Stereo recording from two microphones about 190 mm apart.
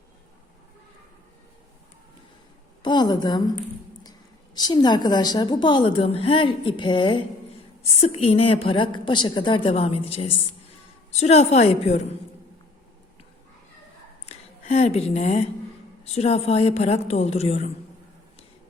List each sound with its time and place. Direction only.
2.8 s a woman's voice: 25° left (ahead or behind)
4.5 s a woman's voice: 20° left (ahead or behind)
14.3 s a woman's voice: 35° left (ahead or behind)